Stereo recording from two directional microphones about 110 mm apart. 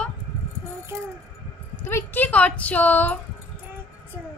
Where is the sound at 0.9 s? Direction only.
25° right (ahead or behind).